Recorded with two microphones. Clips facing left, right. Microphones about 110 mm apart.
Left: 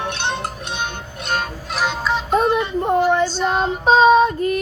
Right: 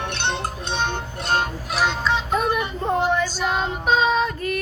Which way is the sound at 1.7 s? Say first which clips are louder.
Left 1 dB; 5° left (ahead or behind).